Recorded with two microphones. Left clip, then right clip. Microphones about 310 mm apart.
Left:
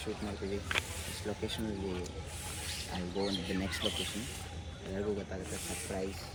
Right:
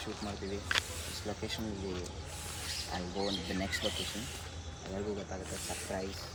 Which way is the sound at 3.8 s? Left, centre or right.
Right.